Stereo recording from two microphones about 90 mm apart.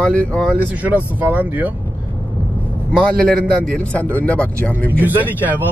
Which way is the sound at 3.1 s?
10° left (ahead or behind).